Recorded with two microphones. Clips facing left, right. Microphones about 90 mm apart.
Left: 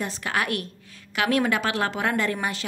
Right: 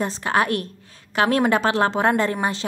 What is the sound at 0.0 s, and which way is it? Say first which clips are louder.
A woman's voice: right 6 dB; 35° right (ahead or behind).